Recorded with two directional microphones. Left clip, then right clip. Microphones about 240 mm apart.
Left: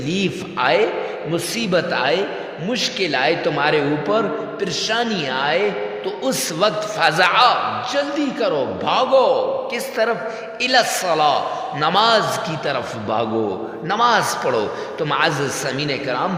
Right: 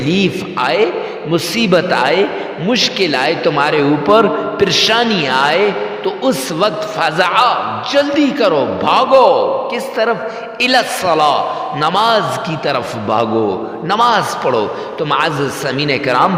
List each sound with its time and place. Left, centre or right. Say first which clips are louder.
0.1 s a man's voice: right 7 dB; right
10.6 s a man's voice: right 4 dB; right